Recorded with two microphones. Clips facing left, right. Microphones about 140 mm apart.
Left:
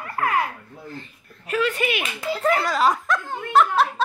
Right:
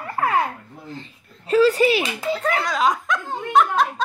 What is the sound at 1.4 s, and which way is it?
Speech, 30° right (ahead or behind).